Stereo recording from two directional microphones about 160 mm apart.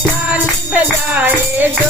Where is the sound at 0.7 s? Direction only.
10° right (ahead or behind).